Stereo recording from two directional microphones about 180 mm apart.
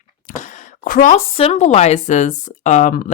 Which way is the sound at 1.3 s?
35° left (ahead or behind).